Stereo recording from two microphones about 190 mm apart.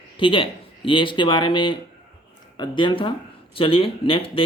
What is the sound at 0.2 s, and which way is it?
Speech, 25° left (ahead or behind).